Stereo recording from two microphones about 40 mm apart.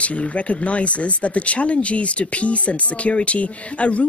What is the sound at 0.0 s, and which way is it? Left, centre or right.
Speech, left.